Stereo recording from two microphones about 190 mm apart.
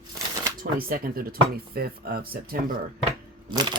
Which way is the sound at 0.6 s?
50° right (ahead or behind).